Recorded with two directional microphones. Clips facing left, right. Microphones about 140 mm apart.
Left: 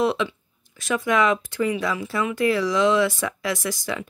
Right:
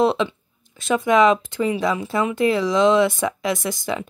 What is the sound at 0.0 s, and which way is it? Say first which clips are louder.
Speech: right 4 dB; 25° right (ahead or behind).